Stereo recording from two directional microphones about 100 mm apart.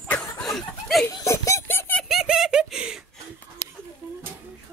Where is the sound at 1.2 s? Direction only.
30° left (ahead or behind).